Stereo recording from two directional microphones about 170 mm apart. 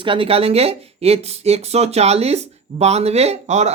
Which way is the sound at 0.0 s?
30° right (ahead or behind).